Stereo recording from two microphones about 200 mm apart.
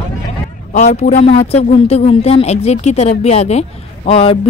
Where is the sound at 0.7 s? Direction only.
35° left (ahead or behind).